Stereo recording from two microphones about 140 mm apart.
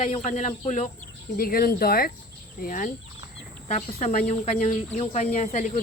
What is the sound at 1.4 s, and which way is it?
Speech, 90° left.